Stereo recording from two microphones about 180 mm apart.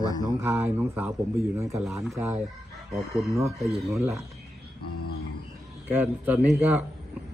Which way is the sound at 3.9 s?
15° right (ahead or behind).